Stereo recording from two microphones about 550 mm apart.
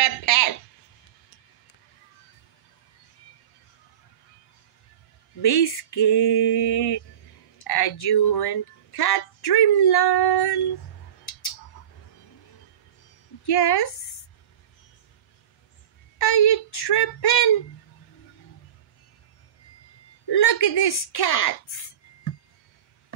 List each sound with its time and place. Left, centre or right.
0.0 s a sound: left
5.4 s speech: left
13.5 s speech: left
16.2 s speech: left
20.2 s speech: left